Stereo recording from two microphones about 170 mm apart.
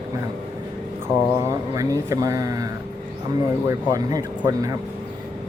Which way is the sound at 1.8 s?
20° right (ahead or behind).